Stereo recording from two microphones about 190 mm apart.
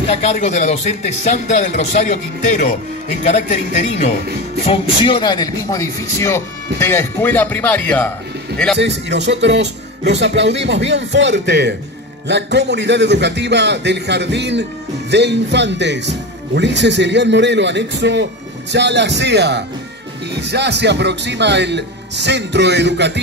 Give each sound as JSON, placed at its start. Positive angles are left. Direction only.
{"t": 0.1, "sound": "speech", "side_deg": 35}
{"t": 4.6, "sound": "speech", "side_deg": 25}
{"t": 8.7, "sound": "a man's voice", "side_deg": -65}